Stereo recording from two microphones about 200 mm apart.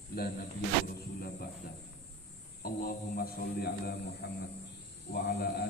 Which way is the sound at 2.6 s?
45° left (ahead or behind).